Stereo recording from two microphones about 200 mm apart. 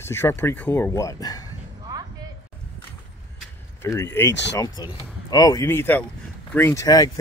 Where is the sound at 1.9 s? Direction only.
20° right (ahead or behind).